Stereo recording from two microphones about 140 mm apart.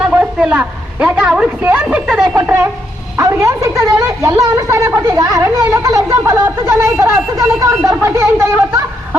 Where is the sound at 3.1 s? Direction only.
20° right (ahead or behind).